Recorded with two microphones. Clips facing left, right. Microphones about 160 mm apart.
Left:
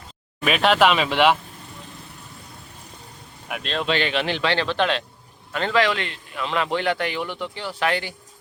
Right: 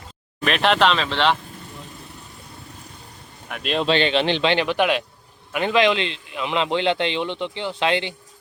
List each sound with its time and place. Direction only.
0.4 s speech: 5° left (ahead or behind)
3.8 s a man's voice: 25° right (ahead or behind)